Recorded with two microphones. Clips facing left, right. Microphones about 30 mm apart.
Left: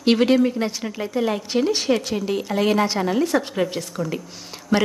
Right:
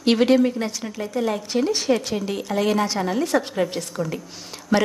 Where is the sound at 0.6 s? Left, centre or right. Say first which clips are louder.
Left 2 dB; centre.